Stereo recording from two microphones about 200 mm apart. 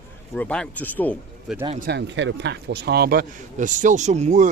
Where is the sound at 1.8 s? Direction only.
55° right (ahead or behind).